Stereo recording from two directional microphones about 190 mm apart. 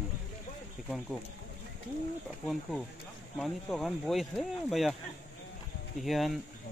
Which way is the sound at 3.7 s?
Centre (ahead or behind).